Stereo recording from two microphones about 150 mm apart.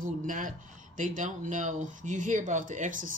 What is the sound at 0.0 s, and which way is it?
Speech, 60° right (ahead or behind).